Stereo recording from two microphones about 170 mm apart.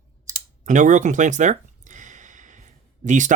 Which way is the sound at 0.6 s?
50° right (ahead or behind).